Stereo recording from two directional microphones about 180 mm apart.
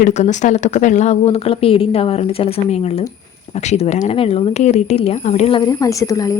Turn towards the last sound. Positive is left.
turn(degrees=20)  # may be behind; listen again after turning